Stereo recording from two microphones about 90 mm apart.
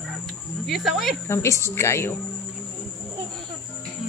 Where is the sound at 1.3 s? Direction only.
30° left (ahead or behind).